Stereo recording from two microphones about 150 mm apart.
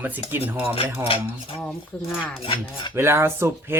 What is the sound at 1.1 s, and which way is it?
Cutlery, 40° left (ahead or behind).